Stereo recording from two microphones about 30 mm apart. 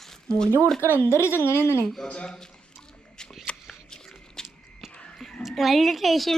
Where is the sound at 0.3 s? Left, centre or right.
Left.